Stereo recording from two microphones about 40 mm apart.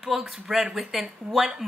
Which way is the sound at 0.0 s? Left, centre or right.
Centre.